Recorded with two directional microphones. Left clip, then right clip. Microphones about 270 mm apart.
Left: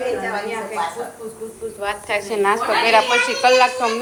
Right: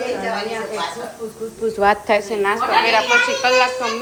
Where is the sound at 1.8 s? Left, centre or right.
Centre.